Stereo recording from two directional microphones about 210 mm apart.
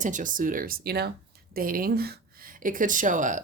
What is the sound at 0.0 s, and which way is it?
Speech, 40° right (ahead or behind).